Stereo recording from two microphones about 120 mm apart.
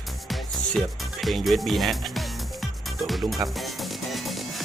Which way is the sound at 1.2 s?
Centre (ahead or behind).